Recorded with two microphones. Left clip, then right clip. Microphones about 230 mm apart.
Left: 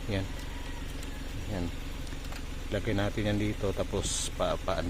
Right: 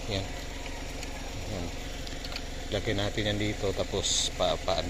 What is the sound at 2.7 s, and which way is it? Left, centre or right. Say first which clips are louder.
A man's voice: right 1 dB; centre.